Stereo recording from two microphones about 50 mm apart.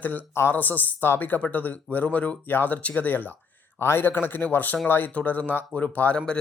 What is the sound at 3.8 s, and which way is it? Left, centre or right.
Speech, left.